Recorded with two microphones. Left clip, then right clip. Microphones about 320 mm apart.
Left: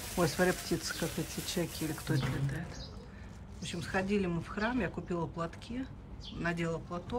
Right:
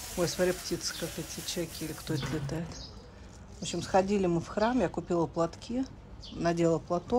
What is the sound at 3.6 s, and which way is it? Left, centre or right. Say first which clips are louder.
Speech: right 8 dB; centre.